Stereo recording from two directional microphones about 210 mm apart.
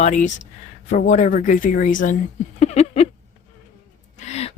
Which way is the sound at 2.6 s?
30° left (ahead or behind).